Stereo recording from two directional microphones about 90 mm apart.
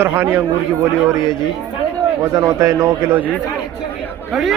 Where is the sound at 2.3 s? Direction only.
40° right (ahead or behind).